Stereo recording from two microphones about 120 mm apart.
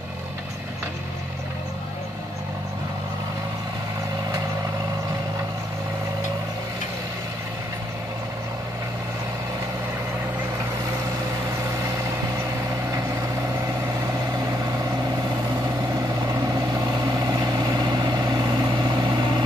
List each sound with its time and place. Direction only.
11.7 s vehicle: 30° right (ahead or behind)
16.3 s vehicle: 30° right (ahead or behind)